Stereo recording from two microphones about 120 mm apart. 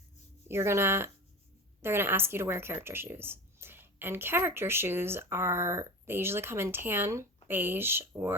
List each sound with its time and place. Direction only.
0.4 s a woman's voice: 20° right (ahead or behind)